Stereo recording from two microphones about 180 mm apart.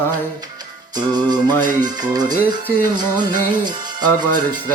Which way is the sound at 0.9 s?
25° right (ahead or behind).